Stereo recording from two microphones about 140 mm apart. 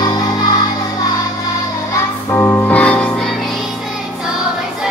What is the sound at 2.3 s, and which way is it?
Music, 15° left (ahead or behind).